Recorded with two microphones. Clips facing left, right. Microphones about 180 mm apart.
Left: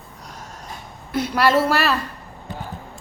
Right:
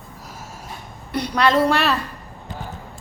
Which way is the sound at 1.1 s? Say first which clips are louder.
Even; 5° left (ahead or behind).